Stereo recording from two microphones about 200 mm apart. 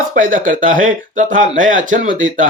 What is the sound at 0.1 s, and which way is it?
Speech, 40° right (ahead or behind).